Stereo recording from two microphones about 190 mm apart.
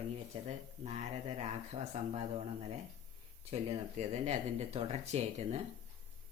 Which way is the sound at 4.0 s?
35° right (ahead or behind).